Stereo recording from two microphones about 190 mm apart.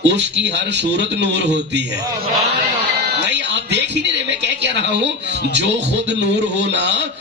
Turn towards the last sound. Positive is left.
turn(degrees=-65)  # may be behind; listen again after turning